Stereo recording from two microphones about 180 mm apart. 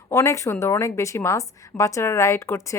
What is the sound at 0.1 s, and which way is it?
A woman's voice, 15° left (ahead or behind).